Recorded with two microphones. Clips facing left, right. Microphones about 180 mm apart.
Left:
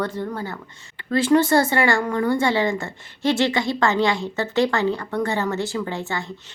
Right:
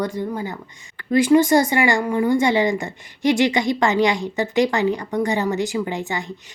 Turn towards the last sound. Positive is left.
turn(degrees=-15)  # may be behind; listen again after turning